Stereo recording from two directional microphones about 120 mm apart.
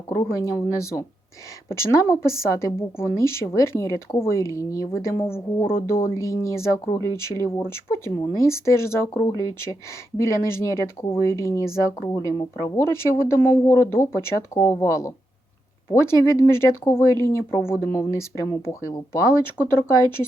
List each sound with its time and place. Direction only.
0.1 s a woman's voice: 25° left (ahead or behind)
19.6 s speech: 10° left (ahead or behind)